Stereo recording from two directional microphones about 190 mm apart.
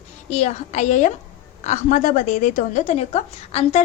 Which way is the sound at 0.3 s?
35° left (ahead or behind).